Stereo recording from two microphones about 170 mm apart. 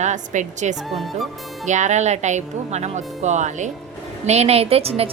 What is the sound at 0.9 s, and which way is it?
Speech, centre (ahead or behind).